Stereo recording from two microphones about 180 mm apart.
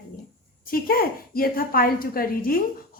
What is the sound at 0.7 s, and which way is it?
A woman's voice, 55° left (ahead or behind).